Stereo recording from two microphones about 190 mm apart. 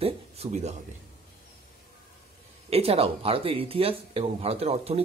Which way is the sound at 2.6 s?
30° right (ahead or behind).